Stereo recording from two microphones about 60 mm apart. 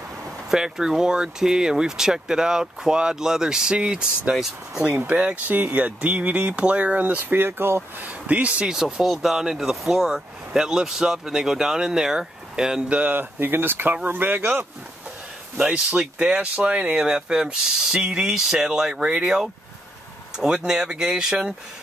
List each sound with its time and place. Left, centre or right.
0.5 s speech: centre
5.1 s speech: right
8.0 s speech: right
8.6 s speech: centre
13.1 s speech: right
15.6 s speech: centre